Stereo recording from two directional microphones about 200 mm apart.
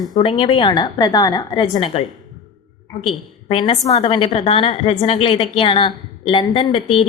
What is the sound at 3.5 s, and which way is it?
A woman's voice, 25° left (ahead or behind).